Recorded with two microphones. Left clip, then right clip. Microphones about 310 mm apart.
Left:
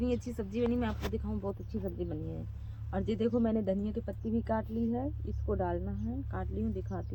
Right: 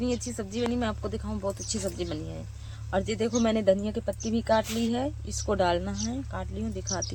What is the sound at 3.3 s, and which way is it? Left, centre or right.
Speech, centre.